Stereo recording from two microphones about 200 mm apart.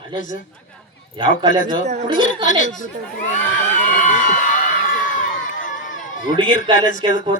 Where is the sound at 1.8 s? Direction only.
35° right (ahead or behind).